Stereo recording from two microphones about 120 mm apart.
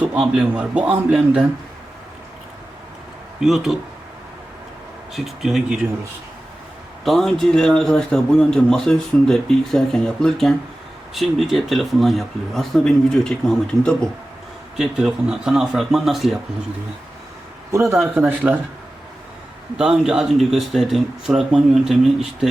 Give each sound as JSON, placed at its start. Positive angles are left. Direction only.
{"t": 0.0, "sound": "a man's voice", "side_deg": -10}
{"t": 3.4, "sound": "a man's voice", "side_deg": 0}
{"t": 5.1, "sound": "a man's voice", "side_deg": 0}
{"t": 7.0, "sound": "a man's voice", "side_deg": 0}
{"t": 14.8, "sound": "a man's voice", "side_deg": -5}
{"t": 17.7, "sound": "a man's voice", "side_deg": -25}
{"t": 19.8, "sound": "a man's voice", "side_deg": -5}